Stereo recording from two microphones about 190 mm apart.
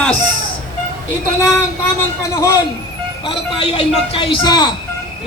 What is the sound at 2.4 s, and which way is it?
Speech, 15° left (ahead or behind).